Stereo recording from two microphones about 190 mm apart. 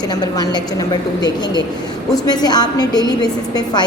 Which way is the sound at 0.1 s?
20° left (ahead or behind).